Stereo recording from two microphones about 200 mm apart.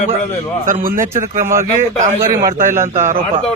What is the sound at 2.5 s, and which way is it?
Speech, 40° right (ahead or behind).